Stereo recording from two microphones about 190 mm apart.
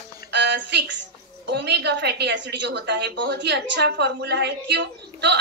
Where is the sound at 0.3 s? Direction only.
65° right (ahead or behind).